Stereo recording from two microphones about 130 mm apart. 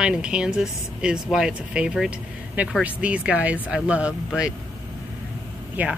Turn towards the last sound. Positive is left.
turn(degrees=-10)  # may be behind; listen again after turning